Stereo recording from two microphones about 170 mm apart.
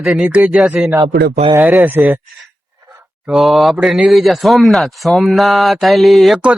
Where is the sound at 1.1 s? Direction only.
70° right (ahead or behind).